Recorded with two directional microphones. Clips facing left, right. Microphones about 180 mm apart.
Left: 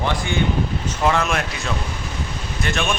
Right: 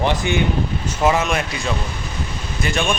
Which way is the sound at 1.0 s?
5° right (ahead or behind).